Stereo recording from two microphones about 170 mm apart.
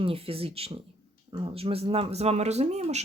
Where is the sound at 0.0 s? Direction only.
35° right (ahead or behind).